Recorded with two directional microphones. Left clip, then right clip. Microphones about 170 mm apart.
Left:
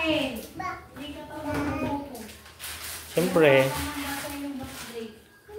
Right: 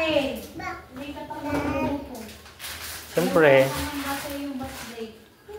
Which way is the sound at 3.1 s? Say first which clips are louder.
Right 2 dB; 20° left (ahead or behind).